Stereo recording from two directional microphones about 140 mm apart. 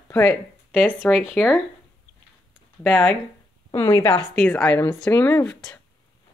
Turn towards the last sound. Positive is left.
turn(degrees=15)  # may be behind; listen again after turning